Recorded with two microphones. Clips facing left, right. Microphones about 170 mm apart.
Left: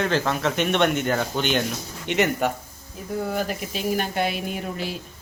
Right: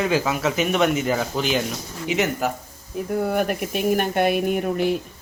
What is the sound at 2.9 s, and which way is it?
Speech, 60° right (ahead or behind).